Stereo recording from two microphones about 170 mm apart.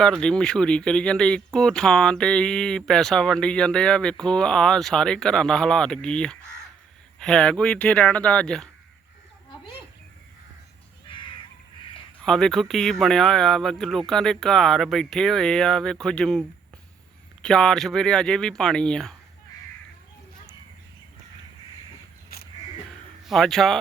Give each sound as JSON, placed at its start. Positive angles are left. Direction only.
{"t": 0.0, "sound": "speech", "side_deg": 5}
{"t": 12.2, "sound": "speech", "side_deg": 5}
{"t": 17.4, "sound": "speech", "side_deg": 5}
{"t": 22.3, "sound": "crow", "side_deg": 60}
{"t": 23.2, "sound": "a man's voice", "side_deg": 0}